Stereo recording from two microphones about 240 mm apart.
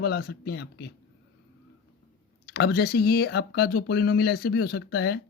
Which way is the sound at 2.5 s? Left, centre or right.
Left.